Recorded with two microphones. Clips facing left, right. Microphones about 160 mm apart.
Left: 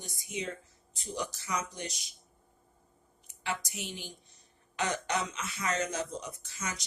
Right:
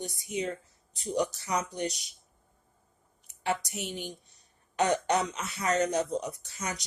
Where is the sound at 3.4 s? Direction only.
40° right (ahead or behind).